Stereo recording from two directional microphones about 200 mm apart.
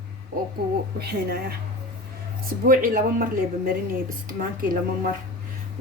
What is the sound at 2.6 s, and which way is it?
Speech, 45° right (ahead or behind).